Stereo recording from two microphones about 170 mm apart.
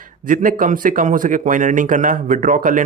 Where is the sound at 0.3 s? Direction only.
50° right (ahead or behind).